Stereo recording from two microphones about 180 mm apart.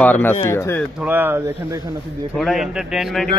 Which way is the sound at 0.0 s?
10° left (ahead or behind).